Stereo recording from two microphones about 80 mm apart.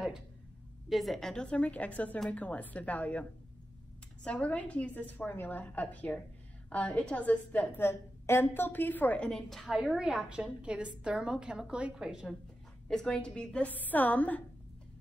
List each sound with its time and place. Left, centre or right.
0.8 s a woman's voice: centre
9.3 s a woman's voice: centre
12.8 s a woman's voice: centre